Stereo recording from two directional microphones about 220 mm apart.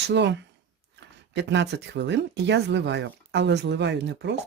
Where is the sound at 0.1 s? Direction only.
50° right (ahead or behind).